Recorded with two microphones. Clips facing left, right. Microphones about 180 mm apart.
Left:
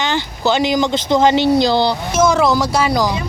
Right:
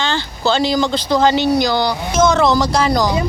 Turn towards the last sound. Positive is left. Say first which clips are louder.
# right 1 dB
turn(degrees=5)  # may be behind; listen again after turning